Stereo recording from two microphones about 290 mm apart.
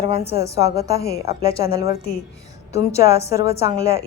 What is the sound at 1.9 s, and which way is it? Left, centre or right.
Speech, left.